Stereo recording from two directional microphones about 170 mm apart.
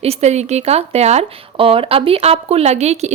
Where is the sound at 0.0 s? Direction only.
40° right (ahead or behind).